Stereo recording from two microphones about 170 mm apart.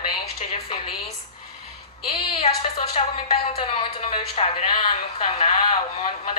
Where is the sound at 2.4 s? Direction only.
35° left (ahead or behind).